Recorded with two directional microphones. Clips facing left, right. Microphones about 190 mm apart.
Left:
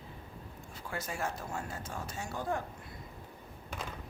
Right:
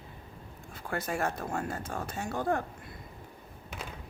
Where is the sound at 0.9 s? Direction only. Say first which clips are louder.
Right 6 dB; 55° right (ahead or behind).